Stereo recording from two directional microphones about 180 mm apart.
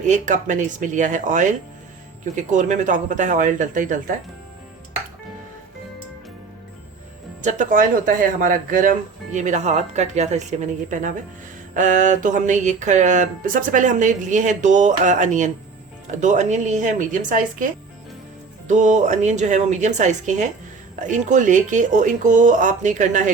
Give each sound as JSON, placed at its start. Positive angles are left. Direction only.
{"t": 0.0, "sound": "speech", "side_deg": -45}
{"t": 7.4, "sound": "speech", "side_deg": -45}
{"t": 18.7, "sound": "speech", "side_deg": -40}